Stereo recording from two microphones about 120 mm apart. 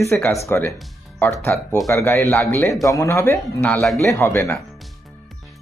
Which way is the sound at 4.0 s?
25° left (ahead or behind).